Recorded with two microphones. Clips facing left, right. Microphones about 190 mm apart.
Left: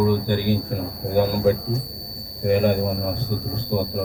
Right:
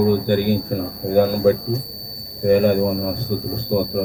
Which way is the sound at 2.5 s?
45° right (ahead or behind).